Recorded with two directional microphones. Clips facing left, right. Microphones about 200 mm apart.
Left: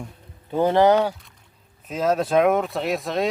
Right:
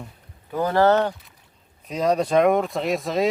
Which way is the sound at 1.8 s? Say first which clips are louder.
Right 1 dB; centre (ahead or behind).